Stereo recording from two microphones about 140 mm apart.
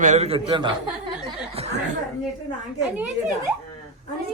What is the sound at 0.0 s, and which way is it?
Speech, 55° right (ahead or behind).